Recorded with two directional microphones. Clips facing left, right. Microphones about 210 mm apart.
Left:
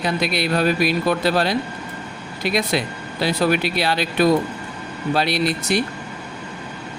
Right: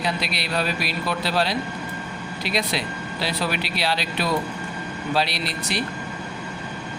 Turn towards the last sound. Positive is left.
turn(degrees=50)  # may be behind; listen again after turning